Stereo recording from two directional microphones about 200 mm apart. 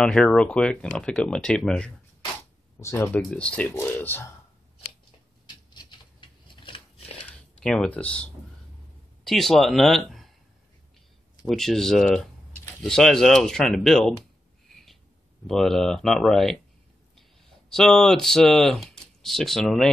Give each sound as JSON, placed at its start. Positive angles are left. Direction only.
{"t": 0.0, "sound": "speech", "side_deg": 0}
{"t": 5.7, "sound": "patter", "side_deg": 20}
{"t": 7.2, "sound": "a sound", "side_deg": 5}
{"t": 9.2, "sound": "speech", "side_deg": 0}
{"t": 11.4, "sound": "speech", "side_deg": 0}
{"t": 15.4, "sound": "speech", "side_deg": 0}
{"t": 17.6, "sound": "speech", "side_deg": 5}